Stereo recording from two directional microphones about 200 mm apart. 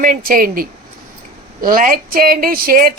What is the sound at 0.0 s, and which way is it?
A woman's voice, 45° right (ahead or behind).